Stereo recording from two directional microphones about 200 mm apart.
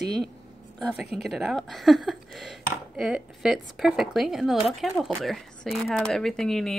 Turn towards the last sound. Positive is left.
turn(degrees=0)  # may be behind; listen again after turning